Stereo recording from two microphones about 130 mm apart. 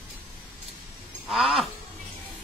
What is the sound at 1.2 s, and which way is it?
Speech, centre (ahead or behind).